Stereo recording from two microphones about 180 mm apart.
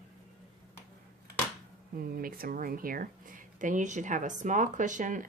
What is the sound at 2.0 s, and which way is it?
A woman's voice, 55° right (ahead or behind).